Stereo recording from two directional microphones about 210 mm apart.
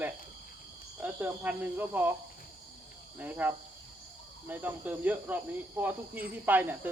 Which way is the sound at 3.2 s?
10° right (ahead or behind).